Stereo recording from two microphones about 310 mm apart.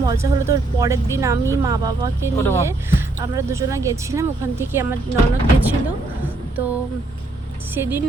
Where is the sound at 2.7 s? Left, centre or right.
Centre.